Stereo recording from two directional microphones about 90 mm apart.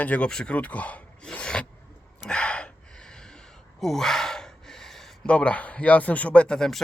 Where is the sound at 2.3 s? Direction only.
10° left (ahead or behind).